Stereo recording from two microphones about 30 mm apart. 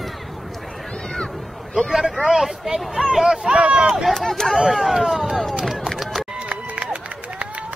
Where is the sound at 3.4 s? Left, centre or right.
Right.